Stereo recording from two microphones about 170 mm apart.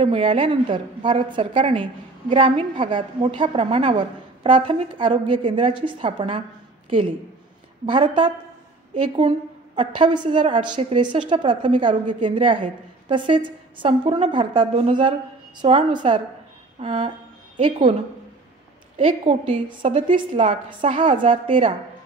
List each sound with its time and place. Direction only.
0.0 s a woman's voice: 35° right (ahead or behind)
9.9 s a woman's voice: 25° right (ahead or behind)
18.9 s a woman's voice: 35° right (ahead or behind)